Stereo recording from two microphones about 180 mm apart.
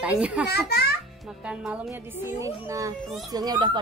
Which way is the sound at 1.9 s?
15° right (ahead or behind).